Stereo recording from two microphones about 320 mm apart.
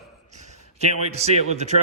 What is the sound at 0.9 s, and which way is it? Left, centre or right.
Speech, centre.